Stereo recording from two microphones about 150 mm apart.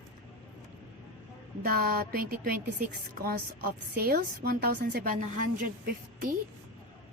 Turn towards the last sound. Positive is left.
turn(degrees=-65)  # may be behind; listen again after turning